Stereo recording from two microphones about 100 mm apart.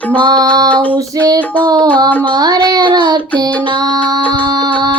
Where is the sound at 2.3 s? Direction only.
45° right (ahead or behind).